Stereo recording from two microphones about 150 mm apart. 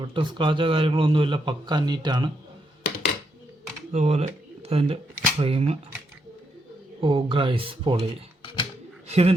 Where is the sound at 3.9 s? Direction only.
50° right (ahead or behind).